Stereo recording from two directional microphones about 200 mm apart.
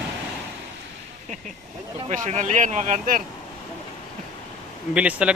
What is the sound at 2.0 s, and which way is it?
Speech, 35° right (ahead or behind).